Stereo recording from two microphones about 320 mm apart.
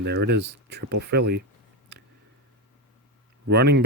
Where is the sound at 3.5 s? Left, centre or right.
Right.